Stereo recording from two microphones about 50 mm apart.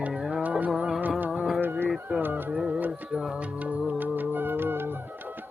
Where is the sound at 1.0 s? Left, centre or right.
Right.